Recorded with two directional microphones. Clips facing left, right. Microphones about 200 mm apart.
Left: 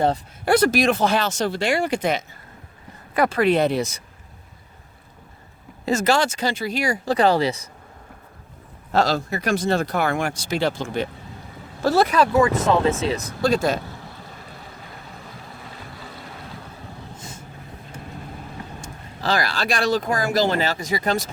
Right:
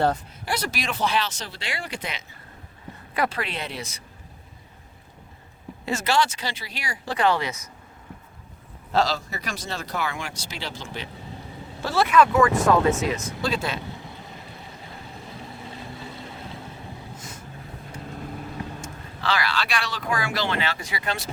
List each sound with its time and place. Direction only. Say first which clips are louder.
0.4 s speech: left 12 dB; 55° left (ahead or behind)
5.8 s speech: left 4 dB; 40° left (ahead or behind)
8.9 s speech: left 3 dB; 50° left (ahead or behind)
11.8 s speech: left 2 dB; 40° left (ahead or behind)
12.4 s speech: left 1 dB; 25° left (ahead or behind); by 13.7 s 45° left (ahead or behind)
18.8 s speech: left 2 dB; 40° left (ahead or behind)